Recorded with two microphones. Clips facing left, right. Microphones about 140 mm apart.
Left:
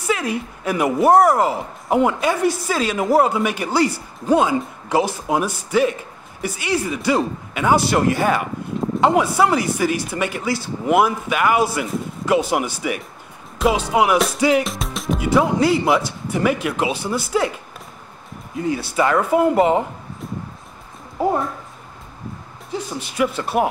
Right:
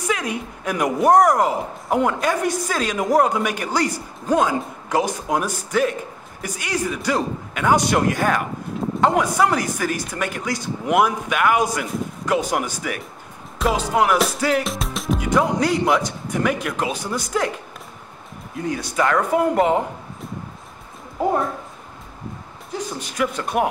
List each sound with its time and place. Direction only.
0.0 s speech: 5° left (ahead or behind)
21.2 s speech: centre (ahead or behind)
23.1 s speech: 5° left (ahead or behind)